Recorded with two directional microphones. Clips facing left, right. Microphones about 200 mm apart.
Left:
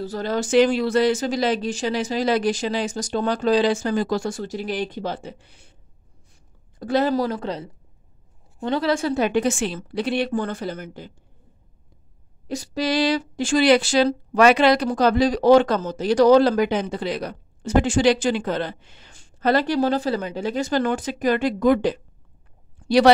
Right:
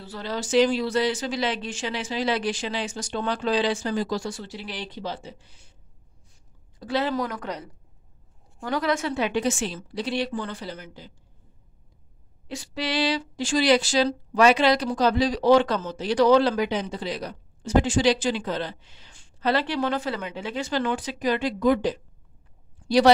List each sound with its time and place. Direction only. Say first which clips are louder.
0.0 s speech: left 7 dB; 45° left (ahead or behind); by 5.8 s 60° left (ahead or behind)
6.8 s speech: left 5 dB; 45° left (ahead or behind)
12.4 s speech: left 6 dB; 40° left (ahead or behind); by 23.1 s 65° left (ahead or behind)